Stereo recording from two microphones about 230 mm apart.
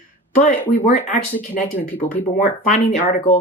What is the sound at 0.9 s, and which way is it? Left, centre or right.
Speech, left.